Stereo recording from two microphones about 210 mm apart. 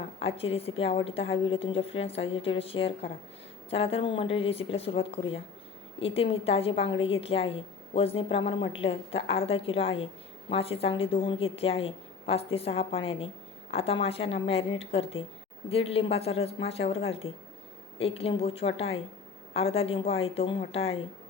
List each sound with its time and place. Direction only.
0.2 s a woman's voice: 25° left (ahead or behind)